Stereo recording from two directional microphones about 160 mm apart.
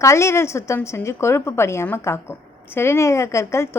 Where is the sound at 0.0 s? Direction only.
15° left (ahead or behind).